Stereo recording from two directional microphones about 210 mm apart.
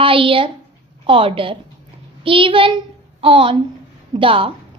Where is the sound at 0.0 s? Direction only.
25° right (ahead or behind).